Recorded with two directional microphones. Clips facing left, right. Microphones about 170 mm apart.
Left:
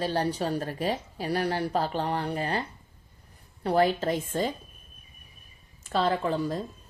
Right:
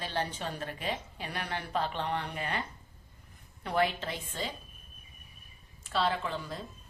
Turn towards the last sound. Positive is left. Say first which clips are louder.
# left 8 dB
turn(degrees=40)  # may be behind; listen again after turning